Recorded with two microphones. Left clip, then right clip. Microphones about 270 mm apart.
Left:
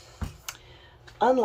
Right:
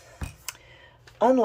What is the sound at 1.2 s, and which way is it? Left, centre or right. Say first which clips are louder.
Speech: right 2 dB; centre.